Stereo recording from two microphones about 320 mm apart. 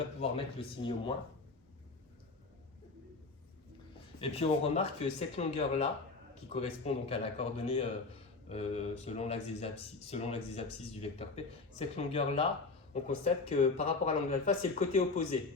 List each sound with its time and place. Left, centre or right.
0.2 s speech: centre
4.2 s speech: centre